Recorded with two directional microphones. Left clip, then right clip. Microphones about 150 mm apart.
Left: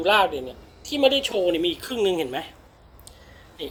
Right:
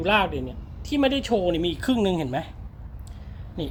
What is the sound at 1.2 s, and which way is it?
A woman's voice, 30° right (ahead or behind).